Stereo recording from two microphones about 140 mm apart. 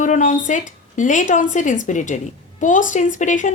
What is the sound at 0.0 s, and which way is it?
A woman's voice, 65° left (ahead or behind).